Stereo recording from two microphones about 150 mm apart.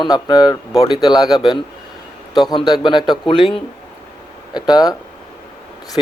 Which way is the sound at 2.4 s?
25° left (ahead or behind).